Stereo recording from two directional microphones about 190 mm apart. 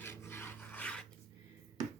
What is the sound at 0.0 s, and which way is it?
Filing, 15° left (ahead or behind).